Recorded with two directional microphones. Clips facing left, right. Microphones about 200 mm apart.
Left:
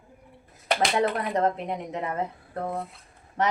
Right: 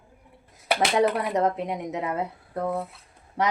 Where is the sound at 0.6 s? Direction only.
5° right (ahead or behind).